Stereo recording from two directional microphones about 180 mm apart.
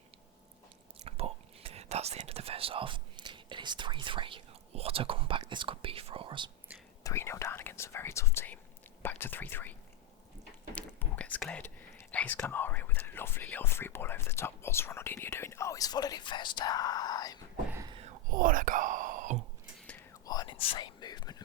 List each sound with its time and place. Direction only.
1.0 s speech: 35° right (ahead or behind)
7.0 s speech: 15° left (ahead or behind)
18.3 s speech: 50° right (ahead or behind)
20.2 s whispering: 20° left (ahead or behind)